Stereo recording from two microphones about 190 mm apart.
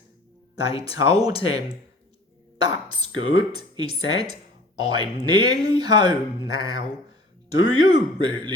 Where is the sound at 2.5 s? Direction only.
25° right (ahead or behind).